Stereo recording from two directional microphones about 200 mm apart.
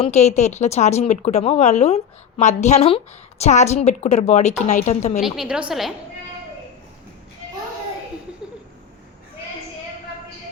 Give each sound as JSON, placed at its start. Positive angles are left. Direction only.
{"t": 0.0, "sound": "a woman's voice", "side_deg": 35}
{"t": 5.2, "sound": "a woman's voice", "side_deg": -5}